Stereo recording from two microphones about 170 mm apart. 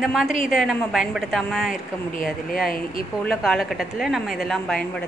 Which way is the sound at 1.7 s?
55° left (ahead or behind).